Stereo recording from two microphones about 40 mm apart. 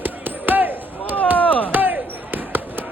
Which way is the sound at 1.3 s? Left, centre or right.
Left.